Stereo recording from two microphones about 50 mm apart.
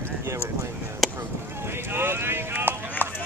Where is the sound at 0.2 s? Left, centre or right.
Right.